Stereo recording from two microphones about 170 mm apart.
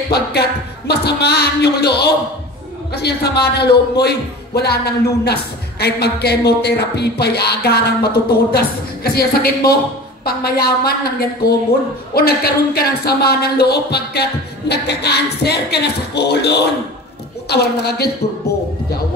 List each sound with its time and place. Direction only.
0.1 s a man's voice: 70° left (ahead or behind)